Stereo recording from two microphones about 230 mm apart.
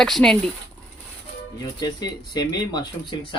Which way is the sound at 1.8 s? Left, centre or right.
Centre.